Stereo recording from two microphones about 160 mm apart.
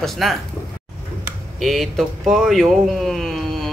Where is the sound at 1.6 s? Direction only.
Centre (ahead or behind).